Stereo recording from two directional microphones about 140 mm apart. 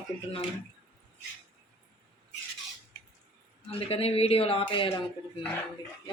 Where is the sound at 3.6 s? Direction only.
45° left (ahead or behind).